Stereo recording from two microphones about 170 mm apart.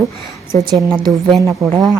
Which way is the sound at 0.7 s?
25° right (ahead or behind).